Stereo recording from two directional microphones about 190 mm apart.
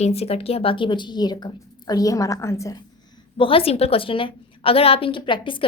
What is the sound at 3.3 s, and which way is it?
A woman's voice, 30° left (ahead or behind).